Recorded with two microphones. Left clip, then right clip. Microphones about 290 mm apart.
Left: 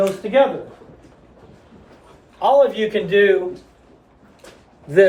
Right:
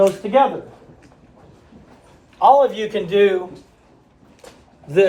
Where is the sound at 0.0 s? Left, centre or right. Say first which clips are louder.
Right 4 dB; right.